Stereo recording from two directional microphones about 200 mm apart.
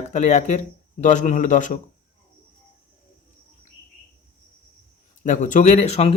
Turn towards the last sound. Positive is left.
turn(degrees=30)  # may be behind; listen again after turning